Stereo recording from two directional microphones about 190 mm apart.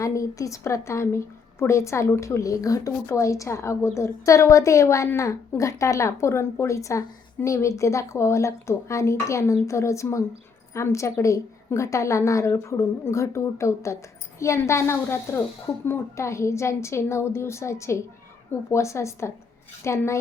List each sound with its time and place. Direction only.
0.0 s a woman's voice: 15° left (ahead or behind)